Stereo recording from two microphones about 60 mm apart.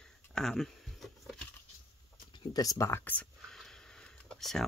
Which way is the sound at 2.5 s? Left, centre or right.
Left.